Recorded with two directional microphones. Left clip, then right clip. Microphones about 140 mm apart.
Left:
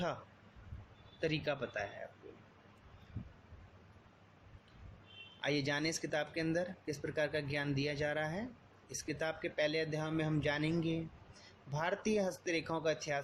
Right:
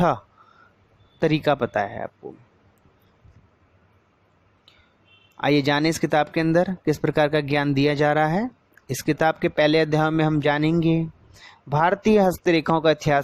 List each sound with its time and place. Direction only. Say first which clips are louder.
1.2 s speech: right 16 dB; 75° right (ahead or behind)
5.4 s speech: right 16 dB; 75° right (ahead or behind)